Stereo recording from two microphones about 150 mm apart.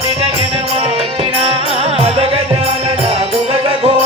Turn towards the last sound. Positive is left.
turn(degrees=-35)  # may be behind; listen again after turning